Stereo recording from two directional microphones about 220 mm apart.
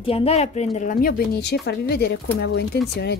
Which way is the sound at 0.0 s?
25° left (ahead or behind).